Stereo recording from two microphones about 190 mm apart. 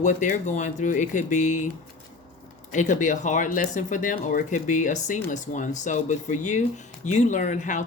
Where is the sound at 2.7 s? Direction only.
40° left (ahead or behind).